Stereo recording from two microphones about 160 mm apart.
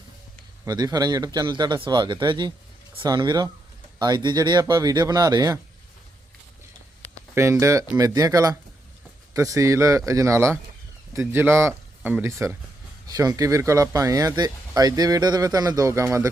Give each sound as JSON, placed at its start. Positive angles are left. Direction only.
{"t": 0.6, "sound": "speech", "side_deg": -25}
{"t": 7.3, "sound": "speech", "side_deg": -15}